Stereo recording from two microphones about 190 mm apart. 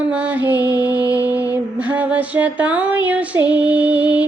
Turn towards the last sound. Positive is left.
turn(degrees=-10)  # may be behind; listen again after turning